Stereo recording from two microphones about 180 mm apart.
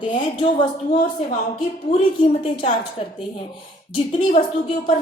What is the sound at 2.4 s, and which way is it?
Speech, 35° left (ahead or behind).